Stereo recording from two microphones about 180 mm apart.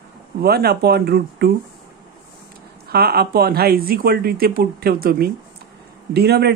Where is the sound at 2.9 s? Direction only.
60° right (ahead or behind).